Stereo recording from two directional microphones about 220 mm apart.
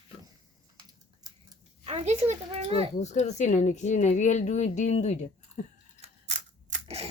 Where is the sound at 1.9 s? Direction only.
30° right (ahead or behind).